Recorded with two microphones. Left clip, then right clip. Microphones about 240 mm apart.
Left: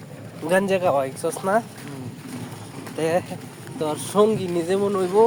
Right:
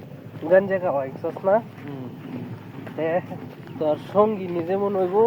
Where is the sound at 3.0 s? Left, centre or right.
Left.